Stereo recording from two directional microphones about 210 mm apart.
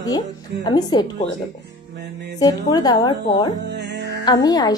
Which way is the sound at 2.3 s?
20° left (ahead or behind).